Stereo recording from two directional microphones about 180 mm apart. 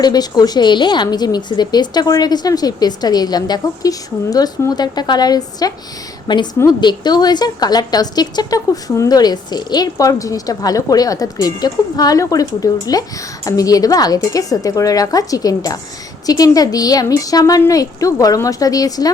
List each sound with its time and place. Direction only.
0.0 s a woman's voice: 20° left (ahead or behind)